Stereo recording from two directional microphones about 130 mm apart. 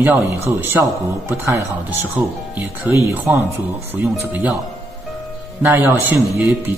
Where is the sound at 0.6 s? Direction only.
15° right (ahead or behind).